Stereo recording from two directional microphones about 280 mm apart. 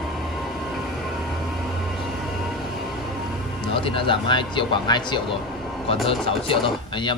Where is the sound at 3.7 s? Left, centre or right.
Centre.